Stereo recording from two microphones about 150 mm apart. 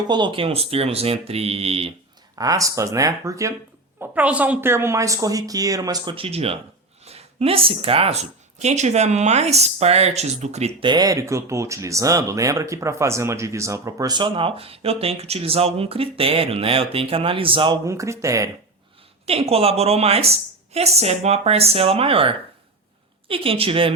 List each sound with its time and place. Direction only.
0.1 s speech: 30° right (ahead or behind)
2.4 s speech: 20° right (ahead or behind)
4.0 s speech: 10° right (ahead or behind); by 10.8 s 45° right (ahead or behind)
10.8 s speech: 25° right (ahead or behind)
17.8 s speech: 20° right (ahead or behind)
19.2 s speech: 40° right (ahead or behind)